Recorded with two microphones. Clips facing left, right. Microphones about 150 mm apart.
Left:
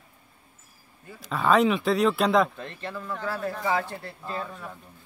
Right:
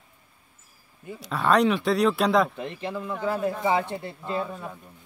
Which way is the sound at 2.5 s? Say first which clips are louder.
Right 4 dB; 15° right (ahead or behind).